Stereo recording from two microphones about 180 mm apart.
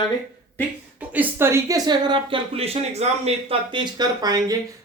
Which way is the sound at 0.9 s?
10° right (ahead or behind).